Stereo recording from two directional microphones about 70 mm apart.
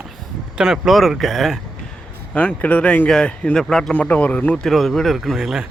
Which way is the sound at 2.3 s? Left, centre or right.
Left.